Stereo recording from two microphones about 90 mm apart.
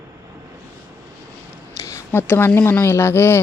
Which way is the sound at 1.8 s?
35° left (ahead or behind).